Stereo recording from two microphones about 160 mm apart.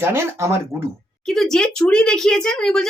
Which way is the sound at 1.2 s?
Centre (ahead or behind).